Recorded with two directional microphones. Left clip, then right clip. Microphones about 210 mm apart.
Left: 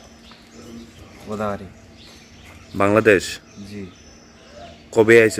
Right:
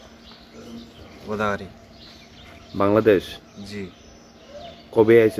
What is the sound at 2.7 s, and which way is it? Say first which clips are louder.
Speech: left 2 dB; centre (ahead or behind).